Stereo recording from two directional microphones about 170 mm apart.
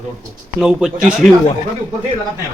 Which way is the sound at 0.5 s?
Centre (ahead or behind).